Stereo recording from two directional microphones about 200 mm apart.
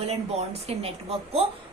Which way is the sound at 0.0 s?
30° right (ahead or behind).